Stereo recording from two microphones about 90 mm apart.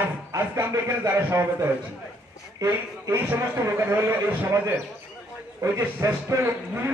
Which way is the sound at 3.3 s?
35° right (ahead or behind).